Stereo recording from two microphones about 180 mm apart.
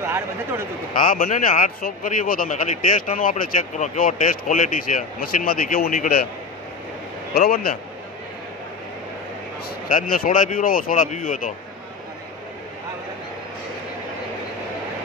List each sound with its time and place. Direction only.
0.0 s speech: 15° right (ahead or behind)
0.9 s speech: 50° left (ahead or behind)
7.3 s a man's voice: 55° left (ahead or behind)
9.8 s speech: 50° left (ahead or behind)